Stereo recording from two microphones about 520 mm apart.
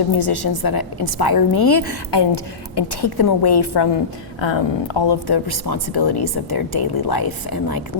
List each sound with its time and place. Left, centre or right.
0.1 s a woman's voice: left
4.4 s a woman's voice: left